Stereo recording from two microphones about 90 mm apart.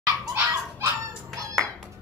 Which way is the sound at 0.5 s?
35° right (ahead or behind).